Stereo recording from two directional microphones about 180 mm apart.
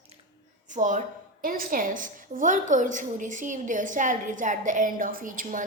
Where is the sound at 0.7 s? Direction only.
45° right (ahead or behind).